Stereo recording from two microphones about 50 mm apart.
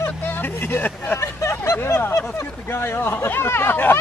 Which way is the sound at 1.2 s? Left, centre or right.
Left.